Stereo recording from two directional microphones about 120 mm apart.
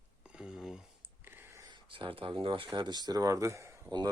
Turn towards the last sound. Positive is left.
turn(degrees=-40)  # may be behind; listen again after turning